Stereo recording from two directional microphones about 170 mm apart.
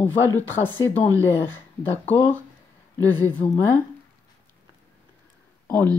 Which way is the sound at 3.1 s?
10° left (ahead or behind).